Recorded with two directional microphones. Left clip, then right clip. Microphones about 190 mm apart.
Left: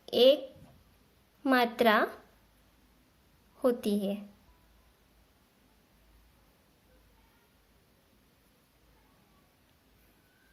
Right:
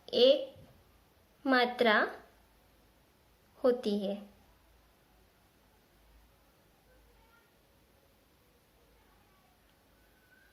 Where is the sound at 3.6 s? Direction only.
35° left (ahead or behind).